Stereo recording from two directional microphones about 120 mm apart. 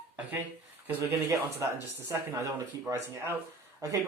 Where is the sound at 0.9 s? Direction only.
20° right (ahead or behind).